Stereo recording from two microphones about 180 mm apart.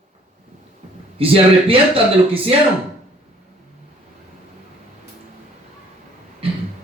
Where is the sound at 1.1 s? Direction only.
30° right (ahead or behind).